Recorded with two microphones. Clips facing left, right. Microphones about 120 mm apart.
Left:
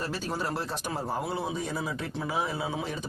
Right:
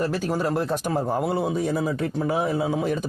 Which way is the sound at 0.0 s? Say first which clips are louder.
Right 8 dB; 55° right (ahead or behind).